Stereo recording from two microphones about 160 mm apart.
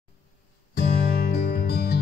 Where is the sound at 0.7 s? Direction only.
80° left.